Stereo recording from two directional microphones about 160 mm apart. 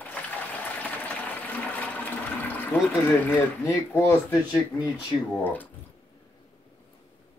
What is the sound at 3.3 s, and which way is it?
Speech, 15° left (ahead or behind).